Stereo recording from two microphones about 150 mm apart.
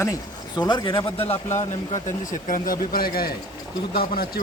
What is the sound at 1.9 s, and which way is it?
A man's voice, 60° left (ahead or behind).